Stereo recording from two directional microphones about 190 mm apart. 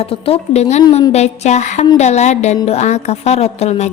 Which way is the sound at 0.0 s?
30° left (ahead or behind).